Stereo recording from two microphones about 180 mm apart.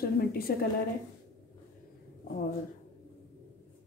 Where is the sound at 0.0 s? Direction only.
55° left (ahead or behind).